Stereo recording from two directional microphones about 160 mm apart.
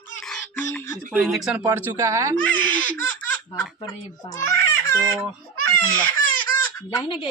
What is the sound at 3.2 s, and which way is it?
Baby laughter, 10° left (ahead or behind).